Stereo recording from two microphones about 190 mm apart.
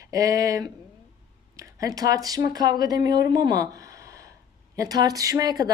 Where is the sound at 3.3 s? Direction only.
20° right (ahead or behind).